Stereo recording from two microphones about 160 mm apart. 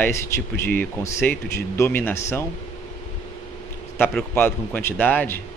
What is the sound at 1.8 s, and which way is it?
Speech, 15° left (ahead or behind).